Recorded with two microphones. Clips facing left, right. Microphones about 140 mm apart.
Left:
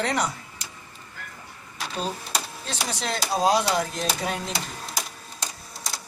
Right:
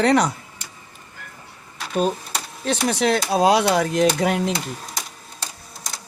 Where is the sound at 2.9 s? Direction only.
65° right (ahead or behind).